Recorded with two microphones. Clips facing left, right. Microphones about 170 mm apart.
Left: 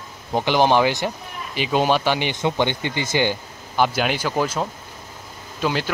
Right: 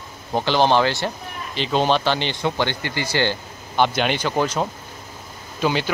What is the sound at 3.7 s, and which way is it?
Speech, 5° left (ahead or behind).